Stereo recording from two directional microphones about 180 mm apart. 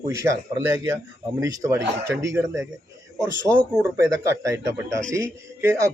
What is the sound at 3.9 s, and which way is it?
Speech, 15° right (ahead or behind).